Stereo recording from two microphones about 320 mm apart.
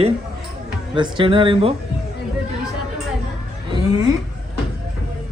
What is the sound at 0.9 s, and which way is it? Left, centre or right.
Speech, centre.